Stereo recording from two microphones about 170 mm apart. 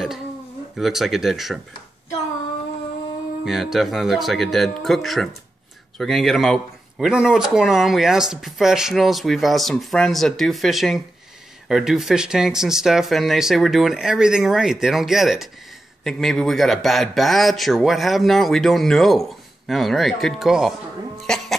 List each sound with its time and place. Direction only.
0.7 s speech: centre (ahead or behind)
3.4 s speech: centre (ahead or behind)